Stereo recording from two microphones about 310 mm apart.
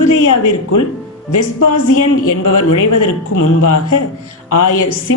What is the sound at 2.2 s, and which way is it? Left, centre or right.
Speech, left.